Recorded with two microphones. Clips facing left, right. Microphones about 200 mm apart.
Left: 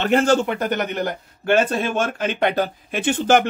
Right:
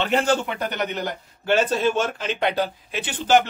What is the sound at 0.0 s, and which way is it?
Speech, 45° left (ahead or behind).